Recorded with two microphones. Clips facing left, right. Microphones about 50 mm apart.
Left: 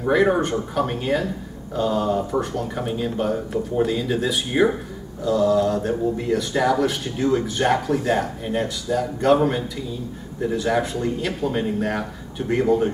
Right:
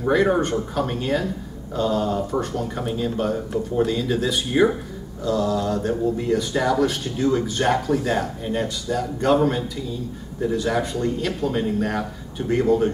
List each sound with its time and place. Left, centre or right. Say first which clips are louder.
0.0 s speech: left 1 dB; centre